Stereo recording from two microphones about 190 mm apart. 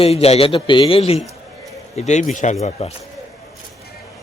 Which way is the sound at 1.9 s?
35° left (ahead or behind).